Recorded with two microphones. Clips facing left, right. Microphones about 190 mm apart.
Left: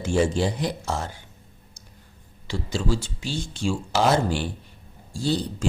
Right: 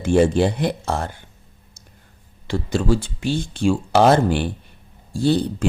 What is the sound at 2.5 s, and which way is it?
Speech, 55° right (ahead or behind).